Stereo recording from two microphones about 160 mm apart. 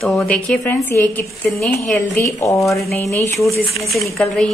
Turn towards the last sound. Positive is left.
turn(degrees=0)  # may be behind; listen again after turning